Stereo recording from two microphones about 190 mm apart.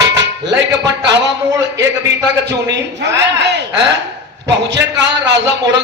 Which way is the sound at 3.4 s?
65° right (ahead or behind).